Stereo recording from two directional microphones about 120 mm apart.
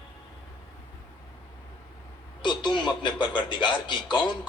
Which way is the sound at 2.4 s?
40° left (ahead or behind).